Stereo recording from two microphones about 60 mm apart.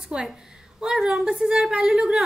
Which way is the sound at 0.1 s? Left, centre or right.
Centre.